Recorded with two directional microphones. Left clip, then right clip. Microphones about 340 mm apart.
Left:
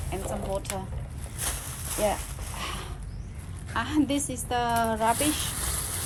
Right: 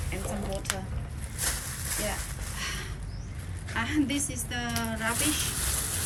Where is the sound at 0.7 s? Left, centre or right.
Centre.